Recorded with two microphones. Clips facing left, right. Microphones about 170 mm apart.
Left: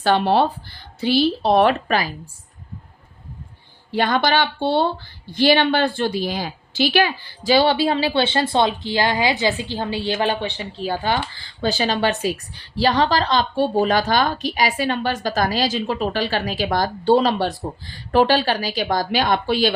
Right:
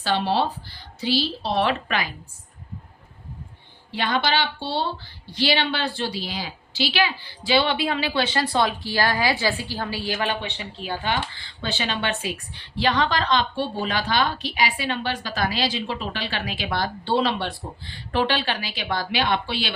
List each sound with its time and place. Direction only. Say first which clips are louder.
0.0 s speech: left 6 dB; 55° left (ahead or behind)
3.9 s speech: left 5 dB; 45° left (ahead or behind)